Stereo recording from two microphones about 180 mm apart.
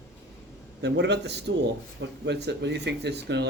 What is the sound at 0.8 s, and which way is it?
Speech, 75° right (ahead or behind).